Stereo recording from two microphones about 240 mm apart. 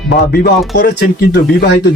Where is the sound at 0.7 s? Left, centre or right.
Left.